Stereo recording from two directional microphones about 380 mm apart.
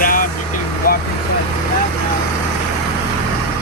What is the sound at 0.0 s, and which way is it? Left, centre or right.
Vehicle, left.